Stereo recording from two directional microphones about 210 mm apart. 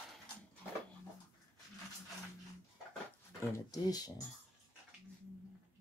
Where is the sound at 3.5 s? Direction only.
20° left (ahead or behind).